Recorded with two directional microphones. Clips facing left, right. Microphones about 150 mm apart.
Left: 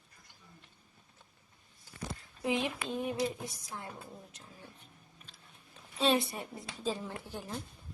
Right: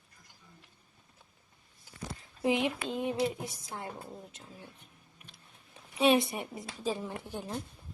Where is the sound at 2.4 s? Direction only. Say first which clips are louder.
Right 4 dB; 20° right (ahead or behind).